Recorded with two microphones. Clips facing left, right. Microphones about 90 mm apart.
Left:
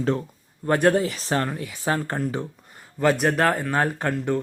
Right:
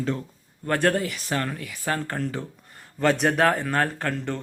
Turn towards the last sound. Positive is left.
turn(degrees=15)  # may be behind; listen again after turning